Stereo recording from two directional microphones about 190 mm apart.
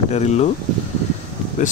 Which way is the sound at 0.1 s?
35° left (ahead or behind).